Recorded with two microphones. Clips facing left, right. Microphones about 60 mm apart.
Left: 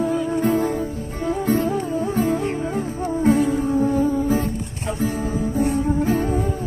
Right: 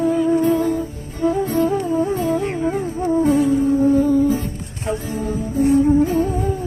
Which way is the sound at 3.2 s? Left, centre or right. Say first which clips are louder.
Even; left.